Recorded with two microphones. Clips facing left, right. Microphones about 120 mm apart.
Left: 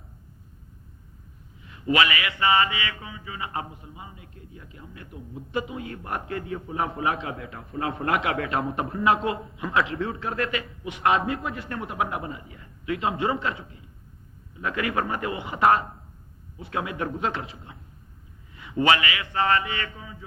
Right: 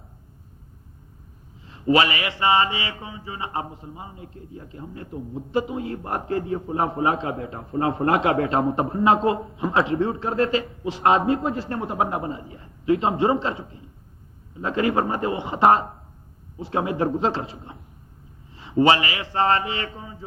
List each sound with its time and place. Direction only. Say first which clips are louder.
1.6 s mantra: right 4 dB; 30° right (ahead or behind)
18.5 s a man's voice: right 4 dB; 30° right (ahead or behind)